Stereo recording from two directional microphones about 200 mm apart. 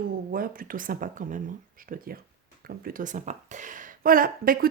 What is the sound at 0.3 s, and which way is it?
Speech, 45° right (ahead or behind).